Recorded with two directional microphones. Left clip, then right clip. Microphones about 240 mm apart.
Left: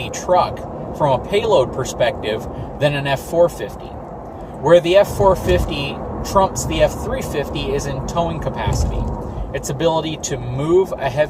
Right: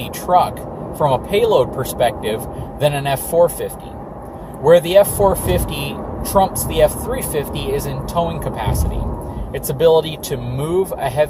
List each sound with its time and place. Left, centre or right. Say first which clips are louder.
0.3 s speech: right 2 dB; centre